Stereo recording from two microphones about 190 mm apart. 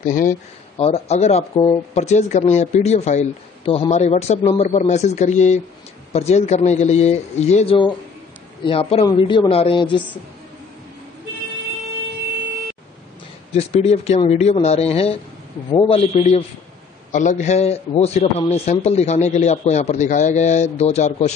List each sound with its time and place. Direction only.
0.0 s a man's voice: 45° left (ahead or behind); by 10.0 s 25° left (ahead or behind)
13.5 s a man's voice: 35° left (ahead or behind)